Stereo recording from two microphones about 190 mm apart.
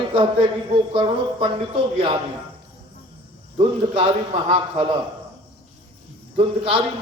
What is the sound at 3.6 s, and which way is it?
A man's voice, 25° right (ahead or behind).